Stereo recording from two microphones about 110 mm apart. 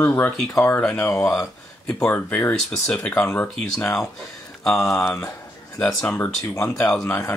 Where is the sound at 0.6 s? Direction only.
5° left (ahead or behind).